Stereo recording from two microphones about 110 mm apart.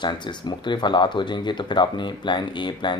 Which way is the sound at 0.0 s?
45° left (ahead or behind).